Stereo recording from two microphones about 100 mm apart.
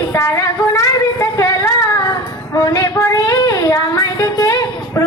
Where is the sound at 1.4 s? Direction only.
35° left (ahead or behind).